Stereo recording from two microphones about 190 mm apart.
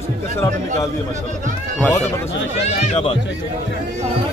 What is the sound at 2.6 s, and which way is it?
Speech, 35° left (ahead or behind).